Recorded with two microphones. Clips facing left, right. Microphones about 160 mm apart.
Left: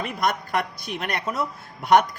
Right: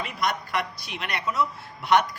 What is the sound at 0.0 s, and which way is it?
Speech, 50° left (ahead or behind).